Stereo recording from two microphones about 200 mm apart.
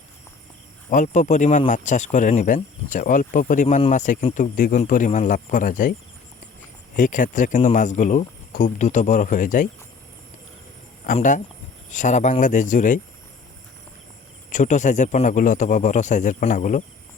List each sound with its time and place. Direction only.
0.9 s speech: 40° left (ahead or behind)
6.9 s speech: 40° left (ahead or behind)
11.0 s speech: 40° left (ahead or behind)
14.5 s speech: 40° left (ahead or behind)